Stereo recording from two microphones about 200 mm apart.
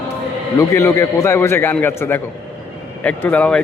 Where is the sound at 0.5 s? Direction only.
15° left (ahead or behind).